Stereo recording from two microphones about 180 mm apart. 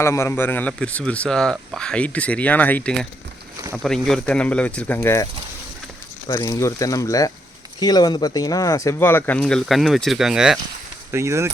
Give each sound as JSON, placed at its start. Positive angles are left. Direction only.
{"t": 0.0, "sound": "speech", "side_deg": 15}
{"t": 11.1, "sound": "speech", "side_deg": -15}